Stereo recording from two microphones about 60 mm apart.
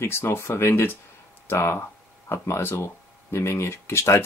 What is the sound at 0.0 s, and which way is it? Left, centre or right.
Speech, left.